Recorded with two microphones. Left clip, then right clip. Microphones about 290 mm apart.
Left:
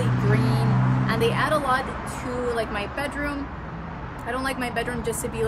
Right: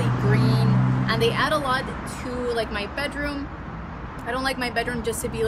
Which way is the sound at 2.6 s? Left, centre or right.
Centre.